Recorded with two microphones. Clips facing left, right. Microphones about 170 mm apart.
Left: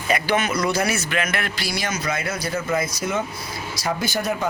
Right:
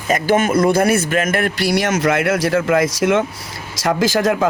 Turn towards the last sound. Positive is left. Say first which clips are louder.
# right 8 dB
turn(degrees=-90)